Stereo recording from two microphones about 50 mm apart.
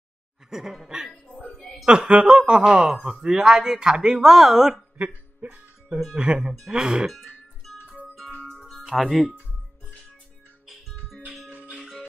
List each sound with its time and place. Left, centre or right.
0.5 s speech: centre
4.9 s music: right
6.1 s speech: centre
8.5 s music: centre
10.7 s music: centre